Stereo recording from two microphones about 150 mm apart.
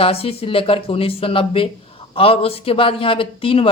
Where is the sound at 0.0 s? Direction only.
40° left (ahead or behind).